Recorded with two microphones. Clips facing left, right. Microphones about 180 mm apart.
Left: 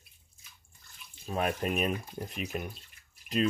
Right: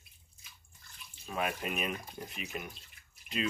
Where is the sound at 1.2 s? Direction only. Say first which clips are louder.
Left 5 dB; 40° left (ahead or behind).